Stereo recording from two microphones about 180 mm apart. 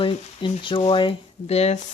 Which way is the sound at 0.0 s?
30° left (ahead or behind).